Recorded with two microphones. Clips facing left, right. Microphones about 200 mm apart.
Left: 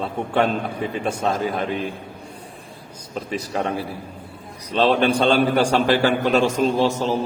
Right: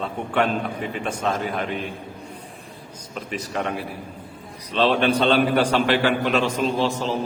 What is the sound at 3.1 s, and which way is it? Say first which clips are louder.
Speech: left 3 dB; 35° left (ahead or behind).